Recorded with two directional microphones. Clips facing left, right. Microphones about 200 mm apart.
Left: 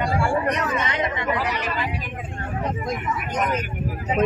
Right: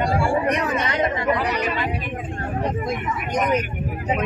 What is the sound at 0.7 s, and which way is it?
Speech, 35° right (ahead or behind).